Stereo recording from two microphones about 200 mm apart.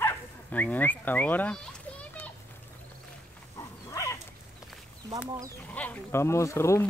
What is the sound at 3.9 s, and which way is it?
Dog, 15° left (ahead or behind).